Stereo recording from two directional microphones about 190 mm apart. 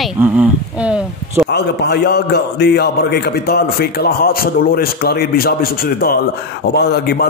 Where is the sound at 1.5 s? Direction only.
60° left (ahead or behind).